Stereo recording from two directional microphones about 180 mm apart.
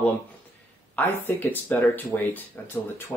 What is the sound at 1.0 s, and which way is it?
Speech, 10° left (ahead or behind).